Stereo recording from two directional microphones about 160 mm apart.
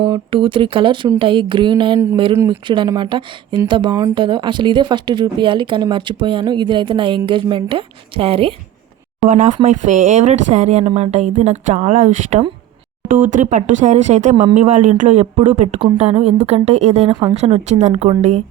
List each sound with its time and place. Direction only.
0.0 s speech: 30° right (ahead or behind)
2.3 s speech: 20° right (ahead or behind)
2.6 s speech: 30° right (ahead or behind)
9.3 s speech: 50° right (ahead or behind)